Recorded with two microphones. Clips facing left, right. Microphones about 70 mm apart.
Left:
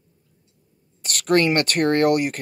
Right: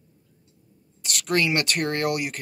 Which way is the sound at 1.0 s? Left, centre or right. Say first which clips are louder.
Left 5 dB; left.